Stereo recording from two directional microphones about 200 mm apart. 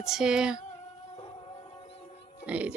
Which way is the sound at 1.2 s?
25° left (ahead or behind).